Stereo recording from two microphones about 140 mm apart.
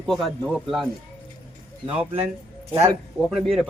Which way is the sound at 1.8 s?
45° right (ahead or behind).